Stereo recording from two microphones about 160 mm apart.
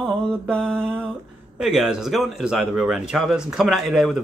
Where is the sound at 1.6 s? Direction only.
Centre (ahead or behind).